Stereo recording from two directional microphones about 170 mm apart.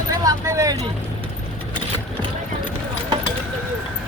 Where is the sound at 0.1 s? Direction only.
20° right (ahead or behind).